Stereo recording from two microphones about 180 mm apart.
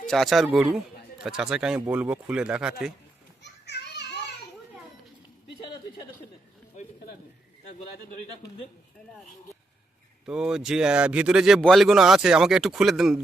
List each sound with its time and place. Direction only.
0.0 s a man's voice: centre (ahead or behind)
3.4 s children playing: 70° left (ahead or behind)
10.2 s a man's voice: 5° right (ahead or behind)